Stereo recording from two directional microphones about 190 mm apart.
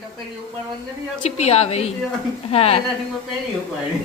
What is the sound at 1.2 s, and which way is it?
A woman's voice, 35° left (ahead or behind).